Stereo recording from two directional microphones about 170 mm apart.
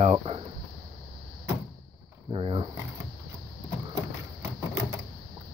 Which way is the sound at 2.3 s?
30° right (ahead or behind).